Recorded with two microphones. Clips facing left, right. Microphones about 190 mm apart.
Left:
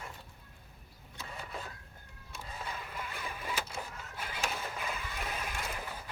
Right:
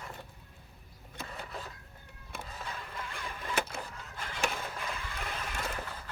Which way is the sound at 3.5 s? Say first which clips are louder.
Right 7 dB; 60° right (ahead or behind).